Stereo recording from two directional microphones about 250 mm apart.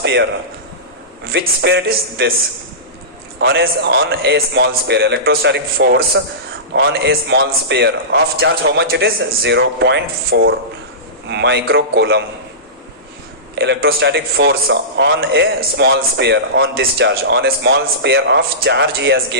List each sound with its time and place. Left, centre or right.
0.0 s a man's voice: right
1.3 s a man's voice: right
3.4 s a man's voice: right
13.6 s a man's voice: right